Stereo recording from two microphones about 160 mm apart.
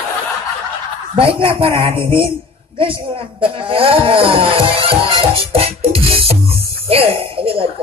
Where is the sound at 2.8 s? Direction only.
35° right (ahead or behind).